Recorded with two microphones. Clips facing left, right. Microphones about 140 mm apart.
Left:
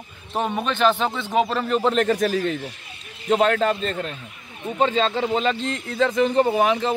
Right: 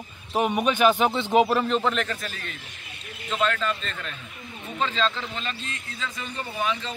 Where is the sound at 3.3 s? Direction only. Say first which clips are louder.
Left 7 dB; 55° left (ahead or behind).